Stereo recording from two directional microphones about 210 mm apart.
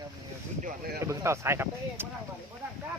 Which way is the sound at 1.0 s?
15° right (ahead or behind).